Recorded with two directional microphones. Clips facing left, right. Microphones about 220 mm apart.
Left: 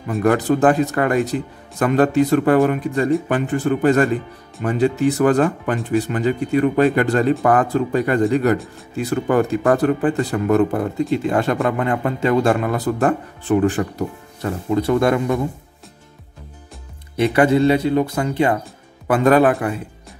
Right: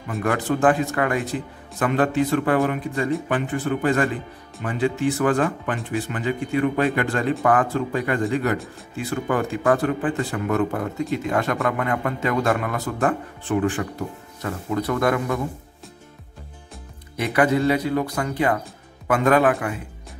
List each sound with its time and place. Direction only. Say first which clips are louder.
0.2 s a man's voice: left 5 dB; 40° left (ahead or behind)
14.7 s speech: left 5 dB; 25° left (ahead or behind)
17.2 s a man's voice: left 5 dB; 30° left (ahead or behind)